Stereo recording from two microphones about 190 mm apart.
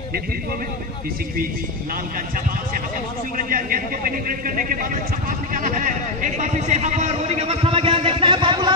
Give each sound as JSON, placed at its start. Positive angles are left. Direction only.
{"t": 3.3, "sound": "a man's voice", "side_deg": -50}